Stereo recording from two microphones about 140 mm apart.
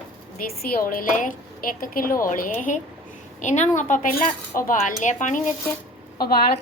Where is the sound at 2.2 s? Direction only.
75° left (ahead or behind).